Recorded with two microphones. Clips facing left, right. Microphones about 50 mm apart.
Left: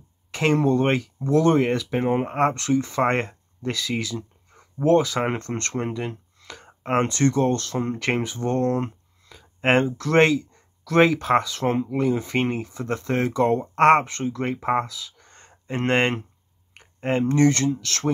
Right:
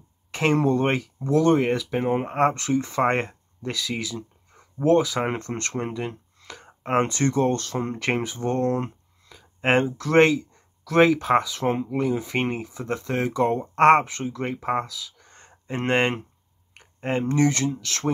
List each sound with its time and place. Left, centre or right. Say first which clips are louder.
0.3 s speech: left 1 dB; centre